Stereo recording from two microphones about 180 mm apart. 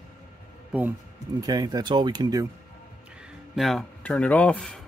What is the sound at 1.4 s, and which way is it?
Speech, 20° right (ahead or behind).